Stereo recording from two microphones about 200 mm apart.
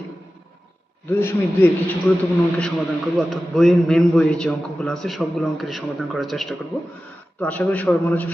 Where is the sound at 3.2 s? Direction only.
Centre (ahead or behind).